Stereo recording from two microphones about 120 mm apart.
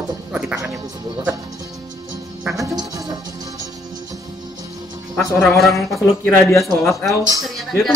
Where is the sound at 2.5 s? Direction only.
25° right (ahead or behind).